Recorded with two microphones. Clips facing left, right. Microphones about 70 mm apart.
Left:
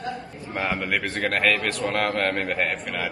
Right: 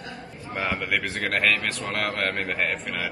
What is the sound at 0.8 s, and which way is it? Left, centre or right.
A man's voice, centre.